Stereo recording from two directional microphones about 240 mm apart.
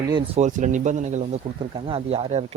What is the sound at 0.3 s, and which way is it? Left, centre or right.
Speech, right.